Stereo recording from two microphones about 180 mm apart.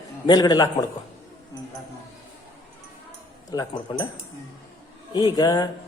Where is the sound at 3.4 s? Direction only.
20° left (ahead or behind).